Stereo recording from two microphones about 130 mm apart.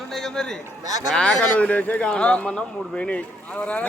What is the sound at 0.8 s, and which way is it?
Speech, 25° right (ahead or behind).